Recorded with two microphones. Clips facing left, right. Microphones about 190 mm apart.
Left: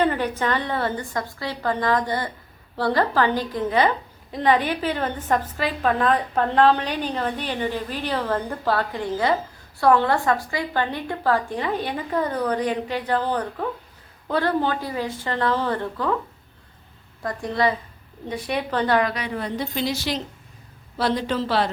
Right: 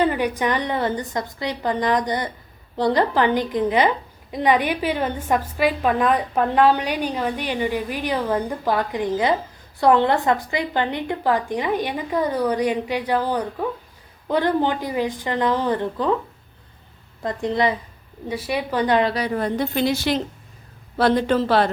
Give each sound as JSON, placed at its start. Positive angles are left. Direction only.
{"t": 0.0, "sound": "a woman's voice", "side_deg": -10}
{"t": 17.2, "sound": "a woman's voice", "side_deg": -20}
{"t": 18.3, "sound": "a woman's voice", "side_deg": -5}
{"t": 18.9, "sound": "a woman's voice", "side_deg": -30}